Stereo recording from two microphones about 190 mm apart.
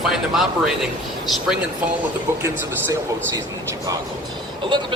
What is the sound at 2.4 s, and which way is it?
Speech, 15° right (ahead or behind).